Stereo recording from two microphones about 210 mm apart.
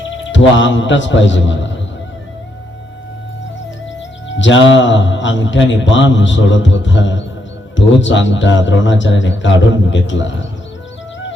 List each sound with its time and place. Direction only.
0.3 s a man's voice: 60° left (ahead or behind)
4.3 s a man's voice: 60° left (ahead or behind)